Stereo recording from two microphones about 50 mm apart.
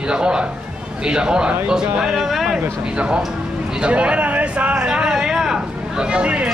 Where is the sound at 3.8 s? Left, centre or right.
Right.